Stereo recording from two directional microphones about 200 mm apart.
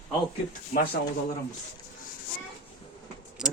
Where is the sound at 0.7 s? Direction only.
35° left (ahead or behind).